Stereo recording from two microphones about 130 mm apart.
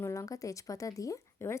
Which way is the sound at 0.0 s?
25° left (ahead or behind).